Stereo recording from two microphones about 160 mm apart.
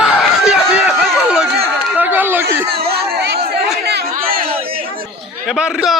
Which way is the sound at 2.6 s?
80° right.